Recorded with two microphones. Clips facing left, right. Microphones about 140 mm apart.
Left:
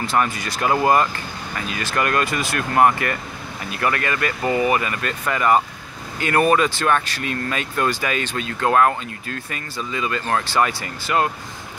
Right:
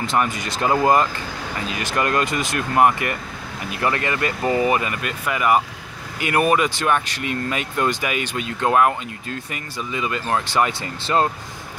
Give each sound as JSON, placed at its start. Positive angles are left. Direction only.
{"t": 0.0, "sound": "speech", "side_deg": -20}